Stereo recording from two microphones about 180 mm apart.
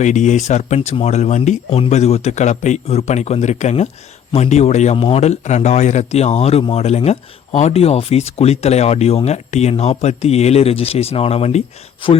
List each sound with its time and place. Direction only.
0.0 s speech: 40° left (ahead or behind)